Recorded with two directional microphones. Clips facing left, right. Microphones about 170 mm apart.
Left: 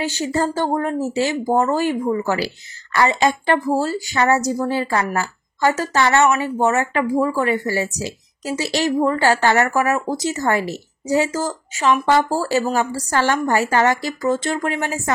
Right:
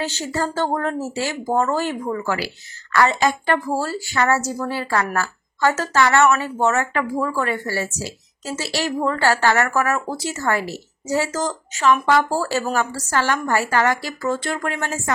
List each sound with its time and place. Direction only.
0.0 s a woman's voice: 15° left (ahead or behind)
13.1 s a woman's voice: 25° left (ahead or behind)